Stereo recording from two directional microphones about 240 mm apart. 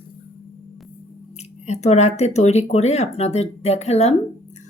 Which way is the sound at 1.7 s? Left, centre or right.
Left.